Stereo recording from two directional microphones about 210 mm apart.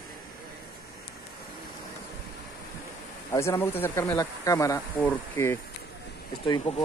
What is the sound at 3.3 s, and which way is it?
Speech, 10° left (ahead or behind).